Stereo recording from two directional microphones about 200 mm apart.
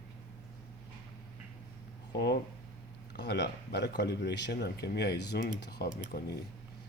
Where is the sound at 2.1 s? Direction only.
55° left (ahead or behind).